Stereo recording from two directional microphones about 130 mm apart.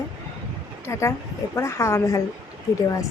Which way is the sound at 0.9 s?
20° left (ahead or behind).